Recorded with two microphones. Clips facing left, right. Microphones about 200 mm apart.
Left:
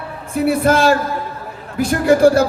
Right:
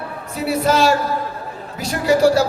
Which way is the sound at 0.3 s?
50° left (ahead or behind).